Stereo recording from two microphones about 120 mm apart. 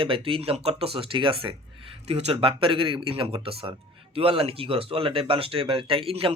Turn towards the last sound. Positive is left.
turn(degrees=-50)  # may be behind; listen again after turning